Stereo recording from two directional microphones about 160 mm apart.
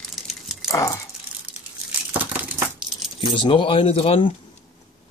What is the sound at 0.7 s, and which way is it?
Speech, 20° left (ahead or behind).